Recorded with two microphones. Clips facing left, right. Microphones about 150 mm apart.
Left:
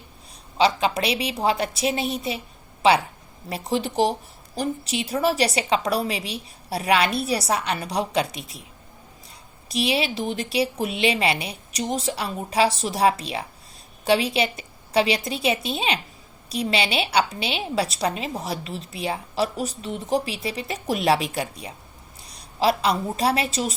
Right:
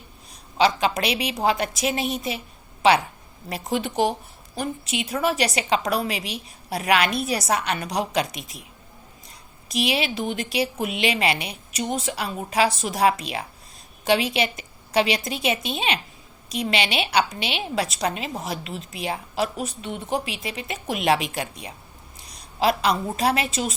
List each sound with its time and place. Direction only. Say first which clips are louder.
0.6 s a woman's voice: even; 30° left (ahead or behind)
3.5 s a woman's voice: left 1 dB; 35° left (ahead or behind)
9.6 s a woman's voice: left 1 dB; 35° left (ahead or behind)